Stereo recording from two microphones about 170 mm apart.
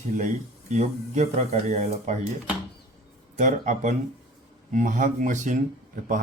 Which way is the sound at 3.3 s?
45° right (ahead or behind).